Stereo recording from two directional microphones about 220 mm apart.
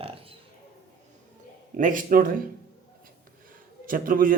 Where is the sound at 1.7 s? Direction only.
40° right (ahead or behind).